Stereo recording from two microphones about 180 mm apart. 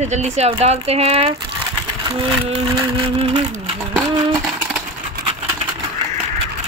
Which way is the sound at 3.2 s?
30° right (ahead or behind).